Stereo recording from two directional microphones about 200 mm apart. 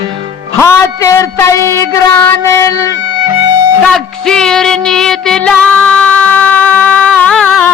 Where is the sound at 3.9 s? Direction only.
5° left (ahead or behind).